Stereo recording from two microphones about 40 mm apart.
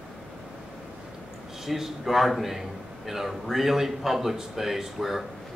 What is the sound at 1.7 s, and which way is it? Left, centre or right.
A man's voice, centre.